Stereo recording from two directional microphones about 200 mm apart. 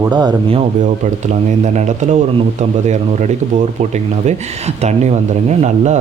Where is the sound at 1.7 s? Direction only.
35° right (ahead or behind).